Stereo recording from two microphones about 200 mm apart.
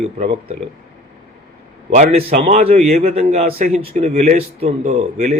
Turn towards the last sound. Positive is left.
turn(degrees=-35)  # may be behind; listen again after turning